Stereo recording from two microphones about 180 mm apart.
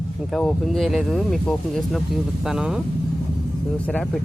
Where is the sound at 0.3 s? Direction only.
Centre (ahead or behind).